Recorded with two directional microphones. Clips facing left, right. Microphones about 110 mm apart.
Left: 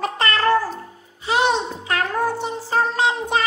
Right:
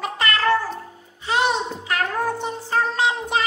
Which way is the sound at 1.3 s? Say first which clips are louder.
Left 2 dB; 15° left (ahead or behind).